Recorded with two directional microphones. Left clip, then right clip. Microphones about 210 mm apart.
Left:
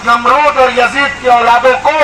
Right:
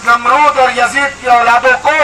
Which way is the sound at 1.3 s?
20° right (ahead or behind).